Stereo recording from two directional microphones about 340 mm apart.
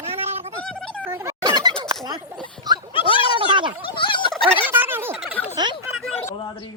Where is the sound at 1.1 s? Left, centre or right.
Centre.